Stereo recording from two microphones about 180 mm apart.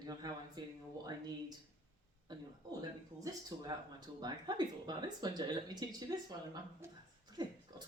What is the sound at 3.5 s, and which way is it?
Speech, 30° right (ahead or behind).